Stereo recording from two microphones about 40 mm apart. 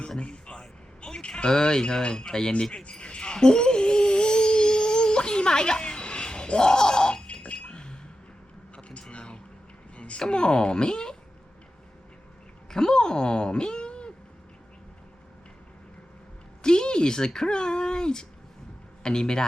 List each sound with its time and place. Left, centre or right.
0.2 s a man's voice: left
2.9 s a sound: left
7.5 s chink: left
8.7 s a sound: left
10.2 s speech: left
12.7 s a woman's voice: centre
16.6 s a man's voice: left